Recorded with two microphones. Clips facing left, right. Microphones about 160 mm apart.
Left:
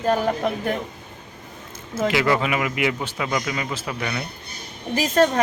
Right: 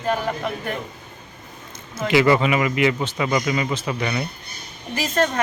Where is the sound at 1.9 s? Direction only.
Centre (ahead or behind).